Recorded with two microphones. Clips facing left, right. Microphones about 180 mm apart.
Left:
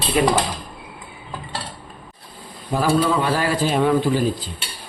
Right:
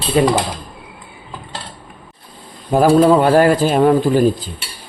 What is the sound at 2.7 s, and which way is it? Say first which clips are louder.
Speech: right 8 dB; 50° right (ahead or behind).